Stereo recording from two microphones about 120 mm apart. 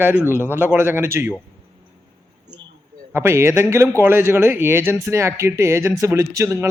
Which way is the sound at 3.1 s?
20° right (ahead or behind).